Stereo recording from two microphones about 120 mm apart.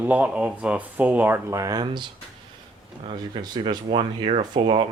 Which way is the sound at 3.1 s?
40° right (ahead or behind).